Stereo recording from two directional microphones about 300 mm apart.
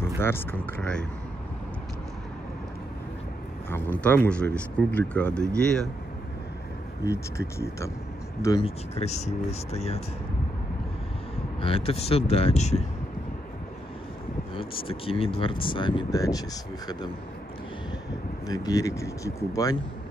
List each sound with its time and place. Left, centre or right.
0.2 s speech: centre
3.7 s speech: centre
7.1 s speech: centre
11.6 s speech: centre
14.5 s speech: centre
18.5 s speech: centre